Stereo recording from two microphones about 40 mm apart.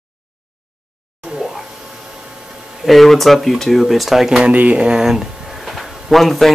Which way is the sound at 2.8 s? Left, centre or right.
Centre.